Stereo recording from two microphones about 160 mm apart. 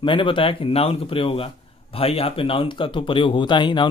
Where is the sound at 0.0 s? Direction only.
30° left (ahead or behind).